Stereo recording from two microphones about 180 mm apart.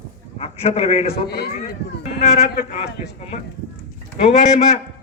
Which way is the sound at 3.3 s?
40° left (ahead or behind).